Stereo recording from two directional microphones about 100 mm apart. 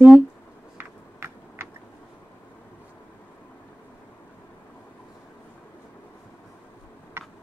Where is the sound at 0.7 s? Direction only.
20° right (ahead or behind).